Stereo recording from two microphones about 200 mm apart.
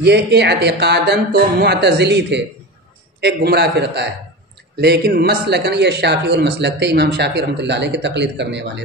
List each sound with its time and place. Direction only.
0.0 s speech: 55° right (ahead or behind)